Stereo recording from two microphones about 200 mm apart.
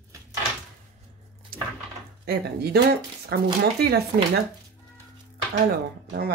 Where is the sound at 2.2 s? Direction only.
50° right (ahead or behind).